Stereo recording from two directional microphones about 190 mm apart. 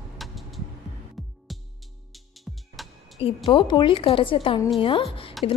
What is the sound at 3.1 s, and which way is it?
A woman's voice, 30° left (ahead or behind).